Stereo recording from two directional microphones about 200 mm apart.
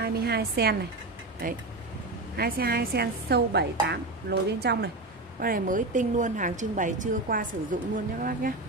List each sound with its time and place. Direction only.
0.0 s a woman's voice: 50° right (ahead or behind)
5.4 s a woman's voice: 45° right (ahead or behind)